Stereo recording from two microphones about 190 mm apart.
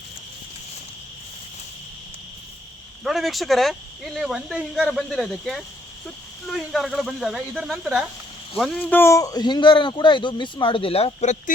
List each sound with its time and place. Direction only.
3.0 s a man's voice: centre (ahead or behind); by 11.5 s 40° left (ahead or behind)